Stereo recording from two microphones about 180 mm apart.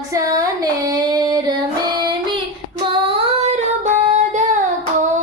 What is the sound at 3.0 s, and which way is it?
Child singing, 35° right (ahead or behind).